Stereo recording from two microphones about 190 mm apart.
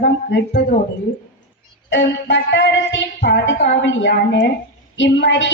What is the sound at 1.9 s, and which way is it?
A woman's voice, 70° left (ahead or behind).